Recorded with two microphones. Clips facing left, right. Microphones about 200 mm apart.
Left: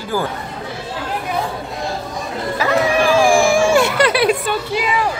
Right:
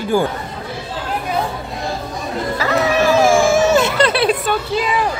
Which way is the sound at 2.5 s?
10° left (ahead or behind).